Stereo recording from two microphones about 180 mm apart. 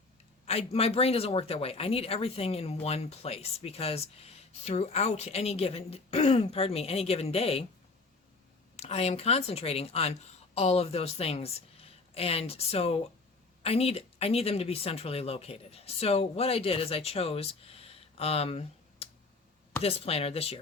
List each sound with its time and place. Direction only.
0.4 s speech: 35° left (ahead or behind)
8.7 s speech: 35° left (ahead or behind)